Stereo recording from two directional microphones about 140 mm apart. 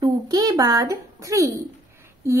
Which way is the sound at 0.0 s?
30° right (ahead or behind).